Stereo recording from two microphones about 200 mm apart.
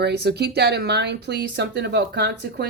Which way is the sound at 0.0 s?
55° right (ahead or behind).